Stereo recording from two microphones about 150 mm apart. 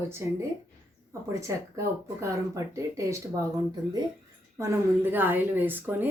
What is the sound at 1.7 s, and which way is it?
A woman's voice, 20° right (ahead or behind).